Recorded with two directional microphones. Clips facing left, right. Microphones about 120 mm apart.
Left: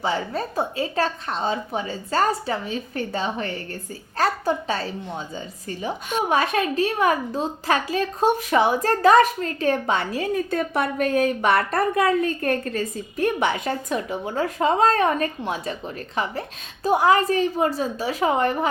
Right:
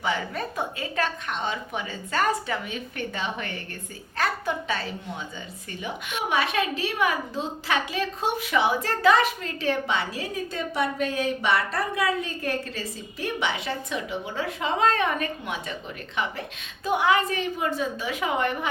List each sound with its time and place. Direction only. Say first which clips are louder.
0.0 s a woman's voice: left 3 dB; 35° left (ahead or behind)